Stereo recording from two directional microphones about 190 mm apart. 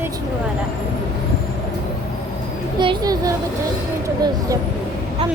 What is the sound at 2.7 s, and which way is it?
Speech, 25° right (ahead or behind).